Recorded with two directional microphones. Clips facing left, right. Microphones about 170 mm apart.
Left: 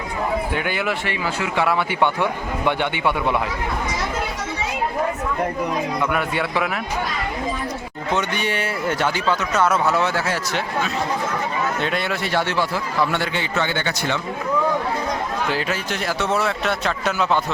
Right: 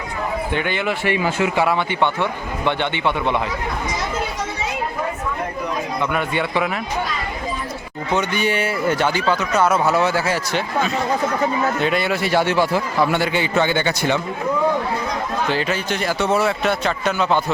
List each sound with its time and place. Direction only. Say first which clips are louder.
0.5 s a man's voice: right 2 dB; 5° left (ahead or behind)
1.0 s a man's voice: right 6 dB; 20° right (ahead or behind)
1.5 s a man's voice: right 1 dB; centre (ahead or behind)
6.0 s speech: right 1 dB; 5° left (ahead or behind)
8.1 s a man's voice: right 3 dB; centre (ahead or behind)
15.5 s speech: right 3 dB; 5° left (ahead or behind)